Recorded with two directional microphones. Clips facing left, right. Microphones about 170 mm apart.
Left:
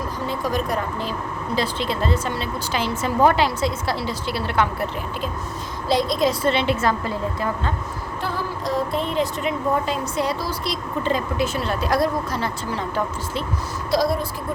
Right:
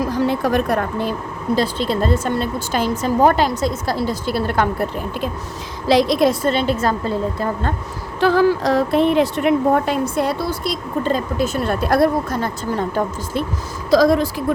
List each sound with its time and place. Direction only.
0.0 s speech: 75° right (ahead or behind); by 1.1 s 60° right (ahead or behind)
1.5 s speech: 40° right (ahead or behind)
5.9 s a woman's voice: 80° right
6.4 s a woman's voice: 40° right (ahead or behind)
8.2 s speech: 90° right; by 13.4 s 45° right (ahead or behind)
13.9 s speech: 90° right